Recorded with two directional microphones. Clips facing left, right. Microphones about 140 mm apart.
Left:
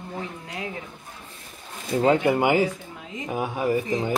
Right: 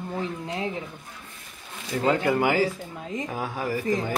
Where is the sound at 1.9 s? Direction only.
20° left (ahead or behind).